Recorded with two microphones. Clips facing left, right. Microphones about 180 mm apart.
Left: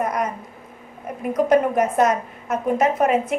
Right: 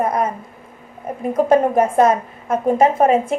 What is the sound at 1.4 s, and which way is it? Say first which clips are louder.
A woman's voice: right 3 dB; 30° right (ahead or behind).